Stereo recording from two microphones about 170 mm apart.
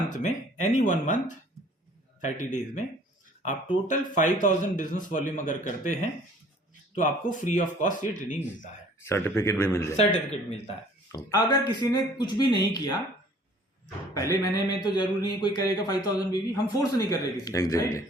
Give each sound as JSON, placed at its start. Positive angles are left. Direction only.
{"t": 0.1, "sound": "a man's voice", "side_deg": 45}
{"t": 2.2, "sound": "a man's voice", "side_deg": 45}
{"t": 3.8, "sound": "a man's voice", "side_deg": 45}
{"t": 9.0, "sound": "a man's voice", "side_deg": 15}
{"t": 10.0, "sound": "a man's voice", "side_deg": 35}
{"t": 11.1, "sound": "a man's voice", "side_deg": 20}
{"t": 14.1, "sound": "a man's voice", "side_deg": 20}